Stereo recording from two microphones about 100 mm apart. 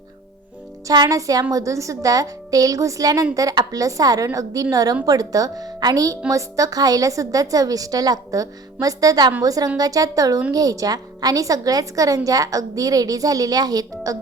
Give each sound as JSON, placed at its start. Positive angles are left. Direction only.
{"t": 0.9, "sound": "a woman's voice", "side_deg": -35}